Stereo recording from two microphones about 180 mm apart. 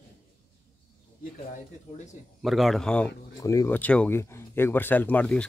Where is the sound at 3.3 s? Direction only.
20° left (ahead or behind).